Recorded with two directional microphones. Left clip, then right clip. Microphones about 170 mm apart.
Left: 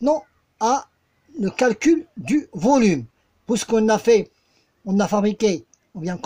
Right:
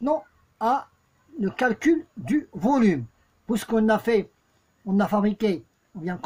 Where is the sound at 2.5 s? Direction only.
30° left (ahead or behind).